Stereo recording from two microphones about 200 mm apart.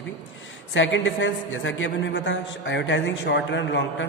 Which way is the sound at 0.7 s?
70° left (ahead or behind).